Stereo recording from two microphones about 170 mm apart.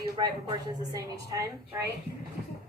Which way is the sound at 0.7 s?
20° right (ahead or behind).